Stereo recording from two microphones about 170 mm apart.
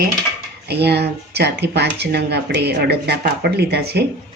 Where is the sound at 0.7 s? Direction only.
75° right (ahead or behind).